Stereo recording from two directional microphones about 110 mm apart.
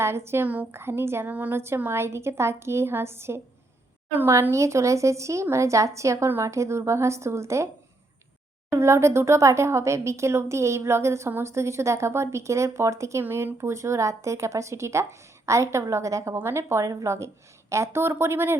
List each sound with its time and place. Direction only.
0.0 s speech: 25° right (ahead or behind)
8.7 s speech: 25° right (ahead or behind)